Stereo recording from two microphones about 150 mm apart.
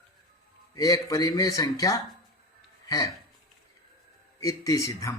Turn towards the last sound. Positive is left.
turn(degrees=20)  # may be behind; listen again after turning